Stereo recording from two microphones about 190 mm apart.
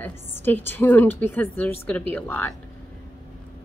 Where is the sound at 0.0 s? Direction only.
10° left (ahead or behind).